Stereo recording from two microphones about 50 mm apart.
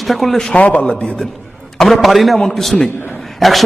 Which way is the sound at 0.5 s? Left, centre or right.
Left.